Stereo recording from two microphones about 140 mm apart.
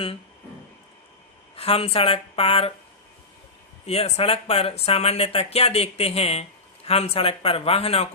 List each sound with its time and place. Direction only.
1.5 s speech: 45° left (ahead or behind)
3.8 s speech: 45° left (ahead or behind)